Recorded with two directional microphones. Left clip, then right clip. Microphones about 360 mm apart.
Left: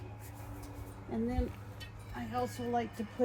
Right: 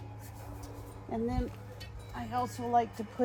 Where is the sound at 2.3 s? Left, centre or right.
Centre.